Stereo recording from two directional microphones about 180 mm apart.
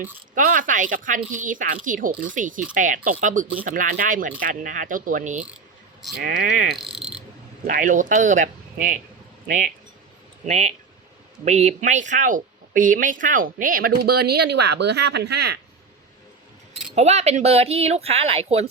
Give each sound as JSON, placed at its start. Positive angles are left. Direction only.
{"t": 0.3, "sound": "speech", "side_deg": -45}
{"t": 16.9, "sound": "speech", "side_deg": -35}